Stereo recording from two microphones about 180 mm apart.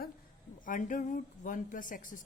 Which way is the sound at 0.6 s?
45° left (ahead or behind).